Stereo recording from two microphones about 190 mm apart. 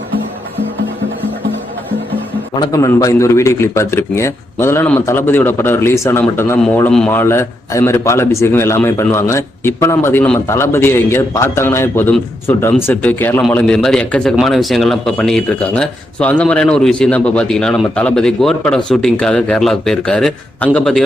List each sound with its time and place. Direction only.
2.6 s a man's voice: 15° left (ahead or behind)